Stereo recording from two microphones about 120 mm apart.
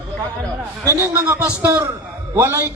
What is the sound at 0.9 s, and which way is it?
A man's voice, 20° right (ahead or behind).